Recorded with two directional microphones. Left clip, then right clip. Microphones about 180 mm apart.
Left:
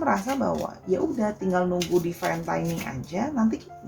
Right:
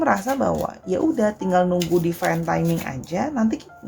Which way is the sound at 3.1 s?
45° right (ahead or behind).